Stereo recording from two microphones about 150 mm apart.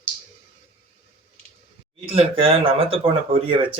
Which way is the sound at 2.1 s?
40° right (ahead or behind).